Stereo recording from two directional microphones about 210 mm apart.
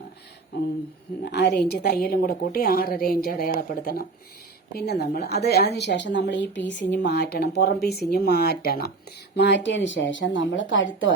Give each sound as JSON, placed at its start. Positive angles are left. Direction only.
{"t": 1.2, "sound": "a woman's voice", "side_deg": 50}